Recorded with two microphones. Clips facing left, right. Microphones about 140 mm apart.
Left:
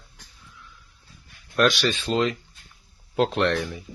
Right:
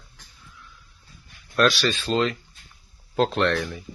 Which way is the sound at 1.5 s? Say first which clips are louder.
Even; 20° left (ahead or behind).